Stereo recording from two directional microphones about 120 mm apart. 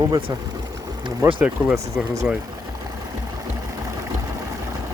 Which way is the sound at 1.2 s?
25° right (ahead or behind).